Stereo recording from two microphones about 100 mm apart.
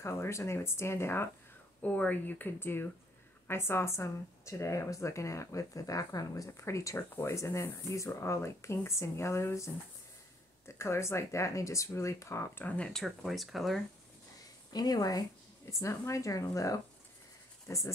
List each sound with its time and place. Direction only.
0.0 s speech: 30° left (ahead or behind)
10.8 s speech: 25° left (ahead or behind)
12.6 s speech: 10° left (ahead or behind)
13.0 s speech: centre (ahead or behind)
14.7 s speech: 40° left (ahead or behind)